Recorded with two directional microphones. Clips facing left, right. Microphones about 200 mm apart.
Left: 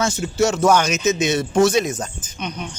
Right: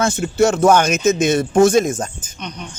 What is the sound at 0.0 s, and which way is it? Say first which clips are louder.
Speech: right 3 dB; 55° right (ahead or behind).